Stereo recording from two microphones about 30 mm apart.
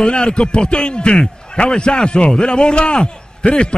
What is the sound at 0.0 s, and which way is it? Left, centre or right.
A man's voice, left.